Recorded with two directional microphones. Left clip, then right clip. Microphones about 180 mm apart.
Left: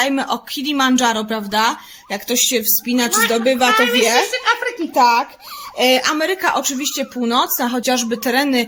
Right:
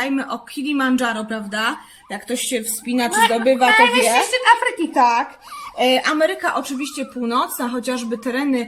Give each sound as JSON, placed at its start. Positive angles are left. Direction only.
{"t": 0.0, "sound": "speech", "side_deg": 60}
{"t": 2.9, "sound": "a woman's voice", "side_deg": 50}
{"t": 6.1, "sound": "speech", "side_deg": 65}